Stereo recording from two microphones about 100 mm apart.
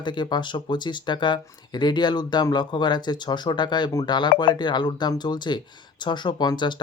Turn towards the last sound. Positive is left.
turn(degrees=50)  # may be behind; listen again after turning